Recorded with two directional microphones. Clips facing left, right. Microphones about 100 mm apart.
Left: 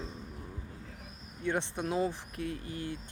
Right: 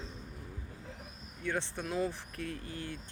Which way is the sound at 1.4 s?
20° left (ahead or behind).